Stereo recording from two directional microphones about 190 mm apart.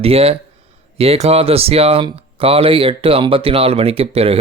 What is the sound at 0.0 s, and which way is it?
Speech, 30° right (ahead or behind).